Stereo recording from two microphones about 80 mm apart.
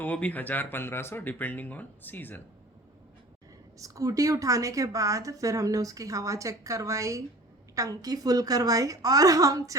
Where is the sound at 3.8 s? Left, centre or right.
Right.